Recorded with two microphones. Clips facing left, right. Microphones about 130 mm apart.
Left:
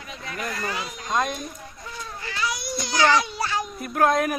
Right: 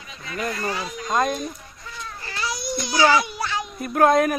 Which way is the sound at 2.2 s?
35° right (ahead or behind).